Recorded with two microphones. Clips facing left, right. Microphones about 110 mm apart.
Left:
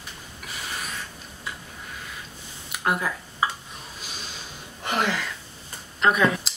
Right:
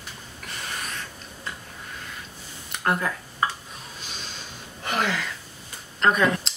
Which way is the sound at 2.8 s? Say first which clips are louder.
Right 1 dB; 5° left (ahead or behind).